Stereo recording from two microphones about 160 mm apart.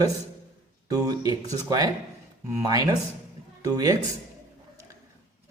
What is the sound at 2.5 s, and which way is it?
A man's voice, 20° right (ahead or behind).